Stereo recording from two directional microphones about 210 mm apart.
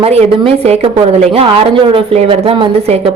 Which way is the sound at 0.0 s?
30° right (ahead or behind).